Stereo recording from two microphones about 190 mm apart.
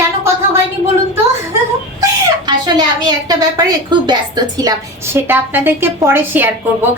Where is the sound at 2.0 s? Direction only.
20° right (ahead or behind).